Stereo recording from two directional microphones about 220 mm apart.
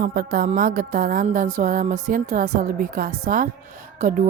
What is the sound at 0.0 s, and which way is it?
Speech, 40° right (ahead or behind).